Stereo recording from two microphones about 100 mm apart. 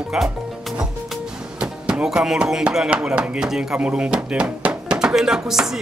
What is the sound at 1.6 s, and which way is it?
Speech, 10° right (ahead or behind).